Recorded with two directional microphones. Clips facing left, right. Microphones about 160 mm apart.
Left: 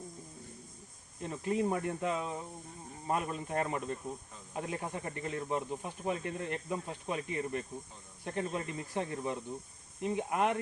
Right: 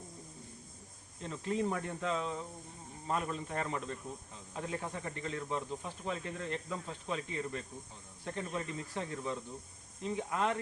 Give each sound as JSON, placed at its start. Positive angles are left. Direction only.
{"t": 1.2, "sound": "speech", "side_deg": 15}